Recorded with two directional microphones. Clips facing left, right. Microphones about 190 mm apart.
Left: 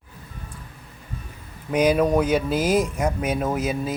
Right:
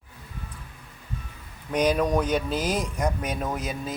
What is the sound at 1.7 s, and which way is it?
Speech, 5° left (ahead or behind).